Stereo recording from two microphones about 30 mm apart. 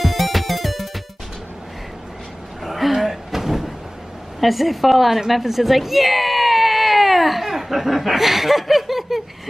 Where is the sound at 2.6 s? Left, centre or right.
Centre.